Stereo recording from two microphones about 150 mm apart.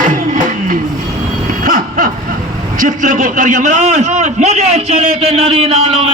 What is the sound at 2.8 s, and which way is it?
A man's voice, 60° right (ahead or behind).